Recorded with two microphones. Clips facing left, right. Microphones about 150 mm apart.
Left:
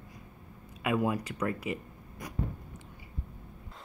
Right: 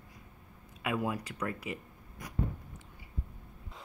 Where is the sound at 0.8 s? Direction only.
55° left (ahead or behind).